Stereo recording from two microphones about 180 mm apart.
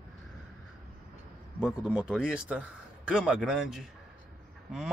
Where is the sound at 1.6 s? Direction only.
5° right (ahead or behind).